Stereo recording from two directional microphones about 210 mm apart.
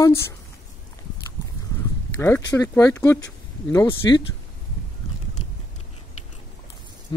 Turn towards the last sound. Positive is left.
turn(degrees=20)  # may be behind; listen again after turning